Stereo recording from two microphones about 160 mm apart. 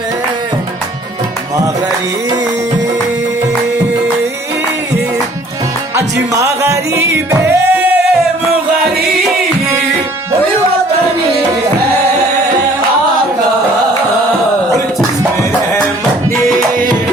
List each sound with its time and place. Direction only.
6.0 s music: 15° right (ahead or behind)